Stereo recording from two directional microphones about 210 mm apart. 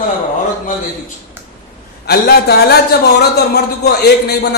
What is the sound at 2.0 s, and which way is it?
Speech, 50° left (ahead or behind).